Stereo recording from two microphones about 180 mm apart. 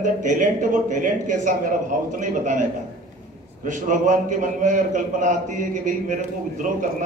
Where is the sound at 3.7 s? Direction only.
45° right (ahead or behind).